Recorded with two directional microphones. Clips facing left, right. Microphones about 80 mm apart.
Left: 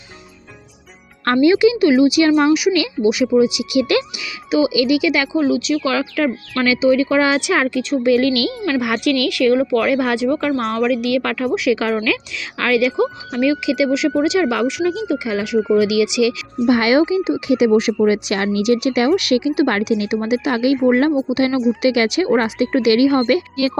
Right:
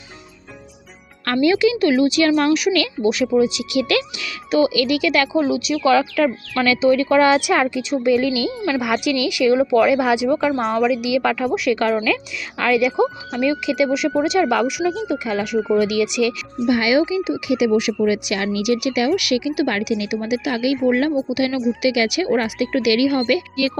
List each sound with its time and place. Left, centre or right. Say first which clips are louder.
1.2 s a woman's voice: left 4 dB; left; by 10.5 s centre
10.6 s a woman's voice: even; centre
16.6 s speech: left 3 dB; left